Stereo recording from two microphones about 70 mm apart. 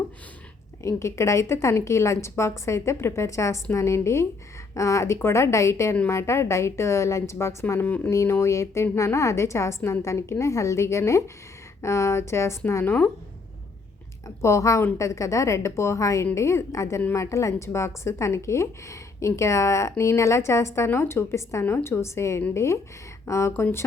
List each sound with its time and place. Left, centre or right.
0.8 s a woman's voice: left
7.8 s speech: left
8.1 s a woman's voice: left
12.8 s speech: left
14.3 s a woman's voice: left